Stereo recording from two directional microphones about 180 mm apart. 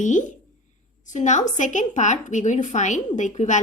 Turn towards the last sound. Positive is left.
turn(degrees=40)  # may be behind; listen again after turning